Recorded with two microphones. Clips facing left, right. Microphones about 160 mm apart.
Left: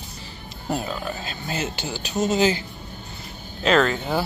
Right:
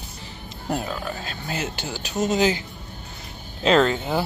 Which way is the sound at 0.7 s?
5° right (ahead or behind).